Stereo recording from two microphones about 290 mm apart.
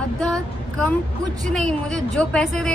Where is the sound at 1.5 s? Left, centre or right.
Centre.